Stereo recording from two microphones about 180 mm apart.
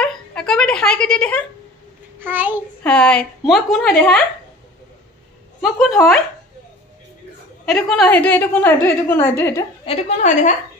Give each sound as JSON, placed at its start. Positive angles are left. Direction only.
{"t": 0.0, "sound": "a sound", "side_deg": 5}
{"t": 2.1, "sound": "a child's voice", "side_deg": -10}
{"t": 2.8, "sound": "a woman's voice", "side_deg": 5}
{"t": 5.6, "sound": "a woman's voice", "side_deg": 0}
{"t": 7.6, "sound": "a woman's voice", "side_deg": 0}
{"t": 9.8, "sound": "a woman's voice", "side_deg": 40}